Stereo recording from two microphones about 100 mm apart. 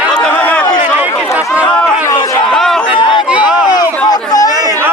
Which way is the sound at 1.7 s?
10° left (ahead or behind).